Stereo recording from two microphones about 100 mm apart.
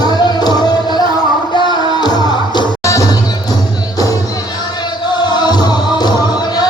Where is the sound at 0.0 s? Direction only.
45° left (ahead or behind).